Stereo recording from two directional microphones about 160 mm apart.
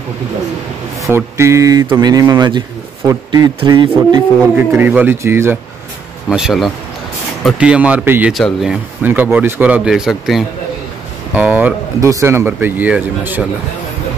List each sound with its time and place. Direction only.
1.0 s a man's voice: 15° right (ahead or behind)
4.7 s speech: 10° right (ahead or behind)
6.2 s speech: centre (ahead or behind)
8.3 s speech: centre (ahead or behind)
9.0 s speech: 10° right (ahead or behind)